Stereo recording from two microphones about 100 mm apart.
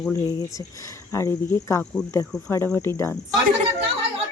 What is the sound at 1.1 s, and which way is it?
Speech, 30° left (ahead or behind).